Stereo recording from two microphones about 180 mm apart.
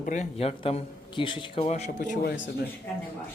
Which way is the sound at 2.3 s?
90° left.